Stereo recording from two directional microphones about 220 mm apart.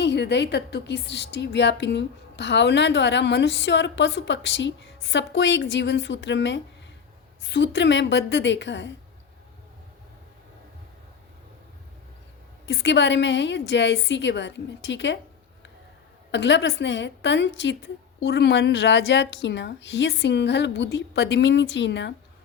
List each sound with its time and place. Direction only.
0.0 s a woman's voice: 50° left (ahead or behind)
12.6 s a woman's voice: 55° left (ahead or behind)
16.3 s a woman's voice: 55° left (ahead or behind)